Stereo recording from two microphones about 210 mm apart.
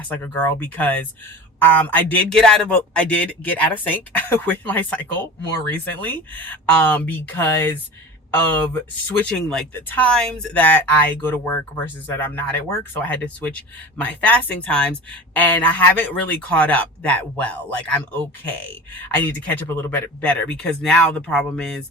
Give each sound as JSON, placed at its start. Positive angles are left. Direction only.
{"t": 0.1, "sound": "speech", "side_deg": 10}